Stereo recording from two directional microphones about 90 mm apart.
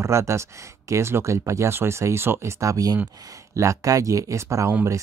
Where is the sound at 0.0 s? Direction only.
30° right (ahead or behind).